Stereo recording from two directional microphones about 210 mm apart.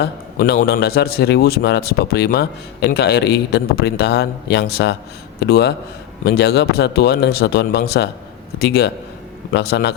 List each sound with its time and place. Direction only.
0.0 s a man's voice: 50° left (ahead or behind)